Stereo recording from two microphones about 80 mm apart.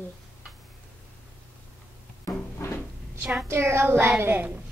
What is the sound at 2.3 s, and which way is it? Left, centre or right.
Cupboard open or close, left.